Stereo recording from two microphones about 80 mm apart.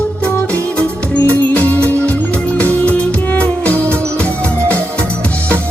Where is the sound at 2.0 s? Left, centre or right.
Centre.